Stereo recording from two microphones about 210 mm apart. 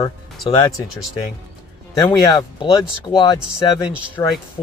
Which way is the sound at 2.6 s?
20° left (ahead or behind).